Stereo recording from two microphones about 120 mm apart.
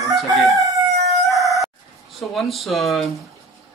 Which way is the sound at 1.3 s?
Centre (ahead or behind).